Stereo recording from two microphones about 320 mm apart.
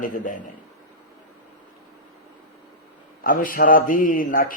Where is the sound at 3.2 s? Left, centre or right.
Left.